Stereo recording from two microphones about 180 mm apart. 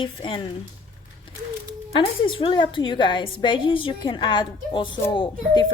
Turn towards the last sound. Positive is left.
turn(degrees=30)  # may be behind; listen again after turning